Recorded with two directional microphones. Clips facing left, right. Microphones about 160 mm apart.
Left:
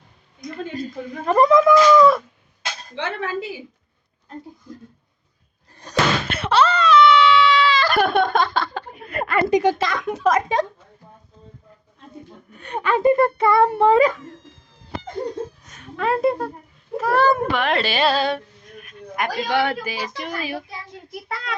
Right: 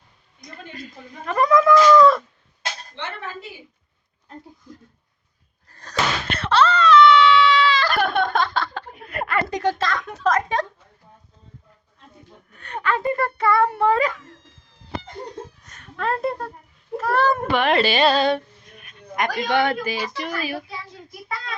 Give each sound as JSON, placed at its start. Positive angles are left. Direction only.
{"t": 0.7, "sound": "speech", "side_deg": 35}
{"t": 2.9, "sound": "speech", "side_deg": 90}
{"t": 5.7, "sound": "slam", "side_deg": 15}
{"t": 6.4, "sound": "wail", "side_deg": 10}
{"t": 9.4, "sound": "a woman's voice", "side_deg": 10}
{"t": 12.5, "sound": "speech", "side_deg": 15}
{"t": 15.6, "sound": "a woman's voice", "side_deg": 0}
{"t": 21.1, "sound": "child singing", "side_deg": 65}